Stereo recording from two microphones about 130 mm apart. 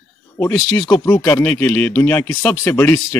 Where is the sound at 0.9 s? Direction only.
15° left (ahead or behind).